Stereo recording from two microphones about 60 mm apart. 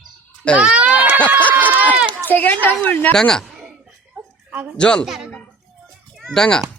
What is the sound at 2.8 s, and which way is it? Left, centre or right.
Speech, left.